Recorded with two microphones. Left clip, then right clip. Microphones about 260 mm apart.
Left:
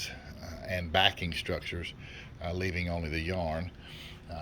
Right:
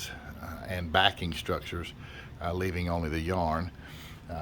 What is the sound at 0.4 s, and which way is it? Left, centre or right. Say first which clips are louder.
Speech: left 2 dB; centre.